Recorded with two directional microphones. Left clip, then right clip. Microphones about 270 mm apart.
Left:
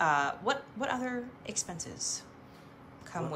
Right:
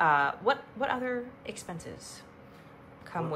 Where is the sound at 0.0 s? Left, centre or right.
Centre.